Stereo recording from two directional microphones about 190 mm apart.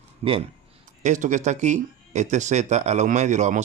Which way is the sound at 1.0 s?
40° right (ahead or behind).